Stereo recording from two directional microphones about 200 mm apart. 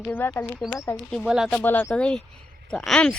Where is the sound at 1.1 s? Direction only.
Centre (ahead or behind).